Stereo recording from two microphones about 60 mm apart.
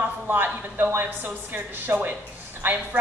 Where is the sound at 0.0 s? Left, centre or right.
Right.